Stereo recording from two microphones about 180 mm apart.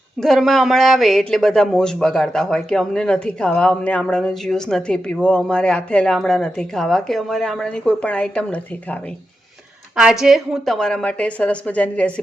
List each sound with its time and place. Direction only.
0.2 s a man's voice: centre (ahead or behind)
9.9 s a man's voice: 5° right (ahead or behind)